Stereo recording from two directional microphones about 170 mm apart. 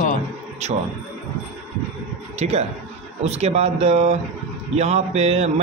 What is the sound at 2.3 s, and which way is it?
A man's voice, 40° right (ahead or behind).